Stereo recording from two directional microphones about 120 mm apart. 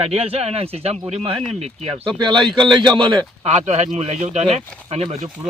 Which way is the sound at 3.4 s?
65° right (ahead or behind).